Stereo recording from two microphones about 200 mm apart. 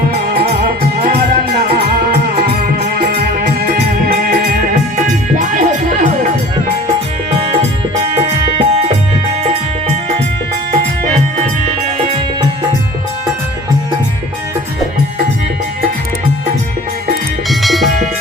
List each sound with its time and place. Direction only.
3.0 s music: 50° right (ahead or behind)
5.4 s music: 40° right (ahead or behind)
8.5 s music: 30° right (ahead or behind)
17.5 s music: centre (ahead or behind)